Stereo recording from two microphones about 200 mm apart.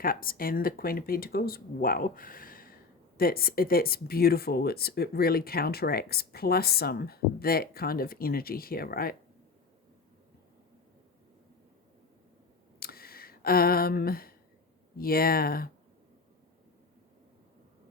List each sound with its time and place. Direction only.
0.0 s speech: 45° left (ahead or behind)
12.8 s a sound: 50° left (ahead or behind)
14.9 s speech: 50° left (ahead or behind)